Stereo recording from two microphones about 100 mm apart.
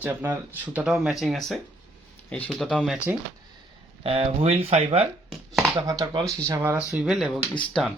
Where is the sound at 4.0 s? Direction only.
75° right (ahead or behind).